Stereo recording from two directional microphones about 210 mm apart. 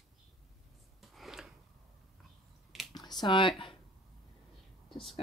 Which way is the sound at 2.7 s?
Centre (ahead or behind).